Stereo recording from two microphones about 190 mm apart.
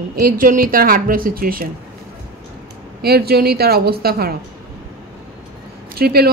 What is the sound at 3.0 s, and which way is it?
A woman's voice, 55° right (ahead or behind).